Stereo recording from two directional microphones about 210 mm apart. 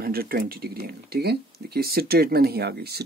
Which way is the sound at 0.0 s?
45° right (ahead or behind).